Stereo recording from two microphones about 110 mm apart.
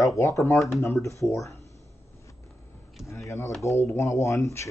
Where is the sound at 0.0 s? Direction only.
30° left (ahead or behind).